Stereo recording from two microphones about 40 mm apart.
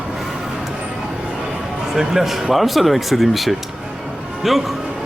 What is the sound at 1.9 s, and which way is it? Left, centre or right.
Speech, centre.